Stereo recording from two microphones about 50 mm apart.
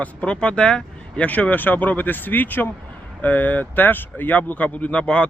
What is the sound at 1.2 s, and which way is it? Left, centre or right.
Speech, left.